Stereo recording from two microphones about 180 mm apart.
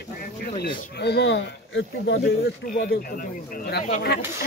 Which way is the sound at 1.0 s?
70° left (ahead or behind).